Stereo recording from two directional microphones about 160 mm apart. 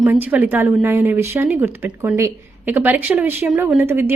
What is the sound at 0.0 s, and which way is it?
A woman's voice, 10° right (ahead or behind).